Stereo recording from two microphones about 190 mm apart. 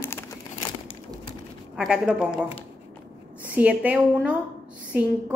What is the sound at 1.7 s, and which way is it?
Speech, 5° right (ahead or behind).